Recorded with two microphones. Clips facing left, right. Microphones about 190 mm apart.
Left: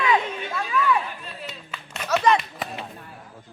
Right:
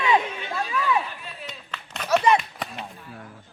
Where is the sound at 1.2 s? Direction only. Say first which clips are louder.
Left 2 dB; 10° left (ahead or behind).